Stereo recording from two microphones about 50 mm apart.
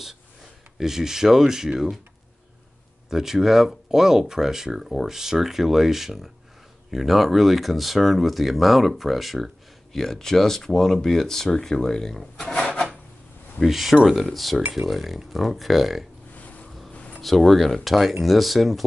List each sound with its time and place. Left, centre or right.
0.7 s speech: centre
3.1 s speech: centre
12.5 s filing: left
13.7 s speech: centre
16.3 s boat: left
16.9 s a sound: left
17.2 s speech: centre